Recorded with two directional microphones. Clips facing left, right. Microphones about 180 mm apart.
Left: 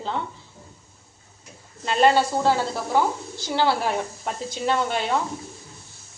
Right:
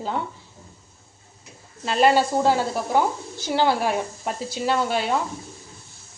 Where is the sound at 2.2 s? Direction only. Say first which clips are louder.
Right 1 dB; 15° right (ahead or behind).